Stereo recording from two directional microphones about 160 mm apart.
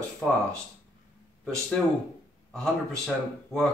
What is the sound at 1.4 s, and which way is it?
Speech, 5° left (ahead or behind).